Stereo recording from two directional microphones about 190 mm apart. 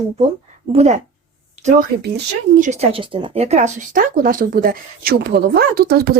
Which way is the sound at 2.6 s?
35° right (ahead or behind).